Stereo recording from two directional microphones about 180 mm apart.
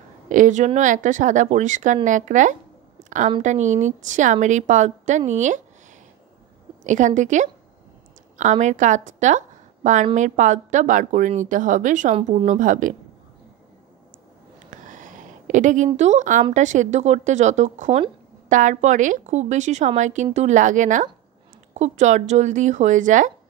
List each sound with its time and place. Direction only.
0.3 s speech: 45° right (ahead or behind)
3.0 s a sound: 45° right (ahead or behind)
3.4 s a woman's voice: 40° right (ahead or behind)
6.8 s speech: 45° right (ahead or behind)
14.7 s a sound: 45° right (ahead or behind)
16.0 s a woman's voice: 40° right (ahead or behind)